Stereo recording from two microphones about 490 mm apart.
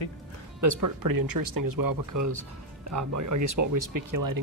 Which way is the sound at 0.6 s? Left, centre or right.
Right.